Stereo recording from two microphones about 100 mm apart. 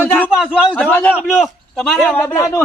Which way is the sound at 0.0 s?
15° left (ahead or behind).